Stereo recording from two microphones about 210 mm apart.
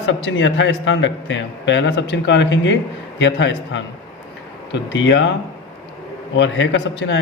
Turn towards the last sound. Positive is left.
turn(degrees=60)  # may be behind; listen again after turning